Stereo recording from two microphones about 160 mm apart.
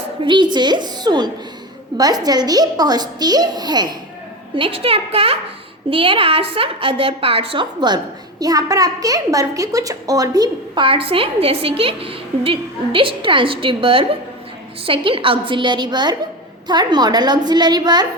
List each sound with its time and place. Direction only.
0.3 s a woman's voice: 30° right (ahead or behind)